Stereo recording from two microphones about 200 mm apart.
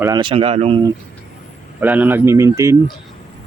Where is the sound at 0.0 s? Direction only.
20° right (ahead or behind).